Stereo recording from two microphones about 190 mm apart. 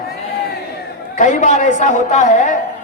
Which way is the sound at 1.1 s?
40° left (ahead or behind).